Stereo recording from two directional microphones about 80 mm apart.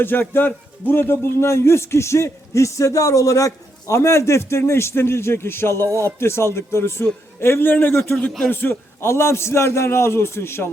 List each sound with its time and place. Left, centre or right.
0.0 s a man's voice: left